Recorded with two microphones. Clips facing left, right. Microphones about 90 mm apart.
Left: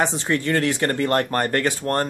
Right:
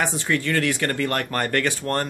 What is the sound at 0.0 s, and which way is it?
Speech, 25° left (ahead or behind).